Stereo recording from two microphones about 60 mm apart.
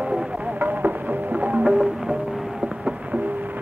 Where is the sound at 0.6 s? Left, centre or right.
Right.